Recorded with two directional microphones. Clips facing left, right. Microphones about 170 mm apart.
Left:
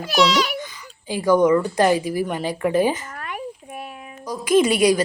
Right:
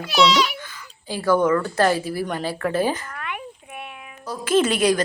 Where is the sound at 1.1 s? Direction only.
15° left (ahead or behind).